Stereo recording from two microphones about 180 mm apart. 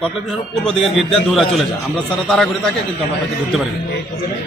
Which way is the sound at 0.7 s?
Centre (ahead or behind).